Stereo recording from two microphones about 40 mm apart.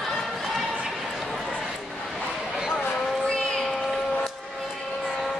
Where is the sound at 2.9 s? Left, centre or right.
Centre.